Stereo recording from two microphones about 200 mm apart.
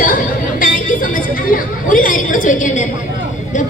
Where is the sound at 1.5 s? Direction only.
40° left (ahead or behind).